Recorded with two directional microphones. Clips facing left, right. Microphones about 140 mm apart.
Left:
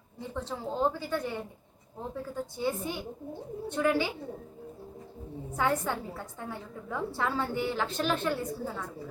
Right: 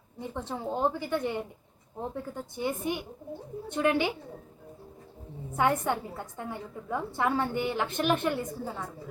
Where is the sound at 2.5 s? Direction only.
20° right (ahead or behind).